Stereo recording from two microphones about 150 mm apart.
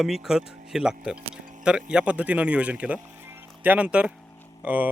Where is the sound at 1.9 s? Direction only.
10° right (ahead or behind).